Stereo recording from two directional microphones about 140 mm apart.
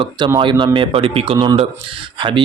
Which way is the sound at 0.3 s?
35° right (ahead or behind).